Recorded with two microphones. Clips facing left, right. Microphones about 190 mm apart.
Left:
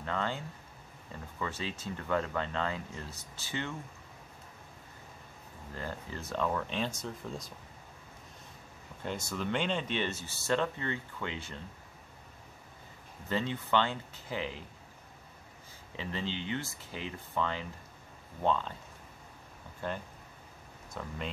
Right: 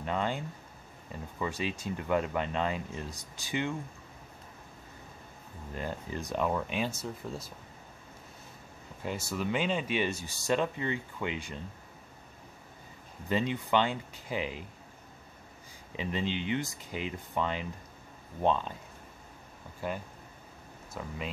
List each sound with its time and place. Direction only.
0.0 s speech: 15° right (ahead or behind)
1.4 s speech: 15° right (ahead or behind)
5.7 s speech: 15° right (ahead or behind)
9.0 s speech: 5° right (ahead or behind)
13.3 s speech: 15° right (ahead or behind)
16.0 s speech: 15° right (ahead or behind)
19.8 s speech: 10° right (ahead or behind)